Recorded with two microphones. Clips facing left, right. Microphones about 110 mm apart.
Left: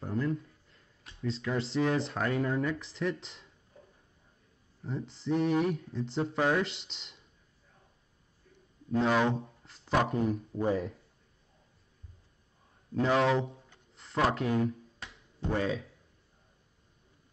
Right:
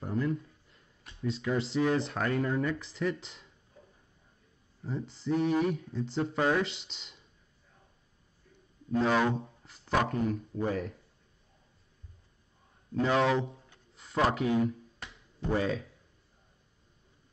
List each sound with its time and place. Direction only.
0.0 s a sound: centre (ahead or behind)
1.4 s speech: 5° right (ahead or behind)
4.8 s speech: centre (ahead or behind)
9.0 s speech: centre (ahead or behind)
10.2 s speech: 25° left (ahead or behind)
13.0 s speech: centre (ahead or behind)
13.7 s a sound: centre (ahead or behind)
15.0 s finger snapping: centre (ahead or behind)